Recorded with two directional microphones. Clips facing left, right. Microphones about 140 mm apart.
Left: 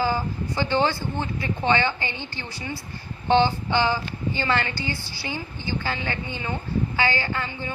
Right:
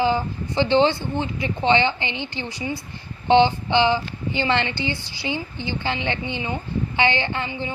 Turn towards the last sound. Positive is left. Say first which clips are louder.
# right 3 dB
turn(degrees=-20)  # may be behind; listen again after turning